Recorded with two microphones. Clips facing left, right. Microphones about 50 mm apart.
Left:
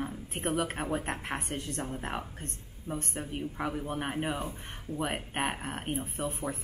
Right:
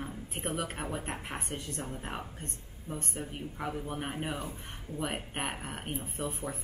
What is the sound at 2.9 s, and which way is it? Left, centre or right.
Speech, left.